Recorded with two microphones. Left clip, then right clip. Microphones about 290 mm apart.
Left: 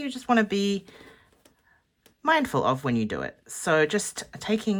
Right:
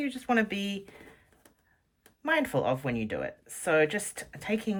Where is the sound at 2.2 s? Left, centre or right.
Centre.